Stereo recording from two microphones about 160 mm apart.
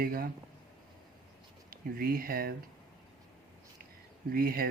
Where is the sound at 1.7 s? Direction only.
70° right (ahead or behind).